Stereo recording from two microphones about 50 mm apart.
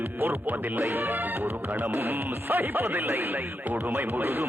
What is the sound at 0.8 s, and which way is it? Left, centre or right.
Speech, right.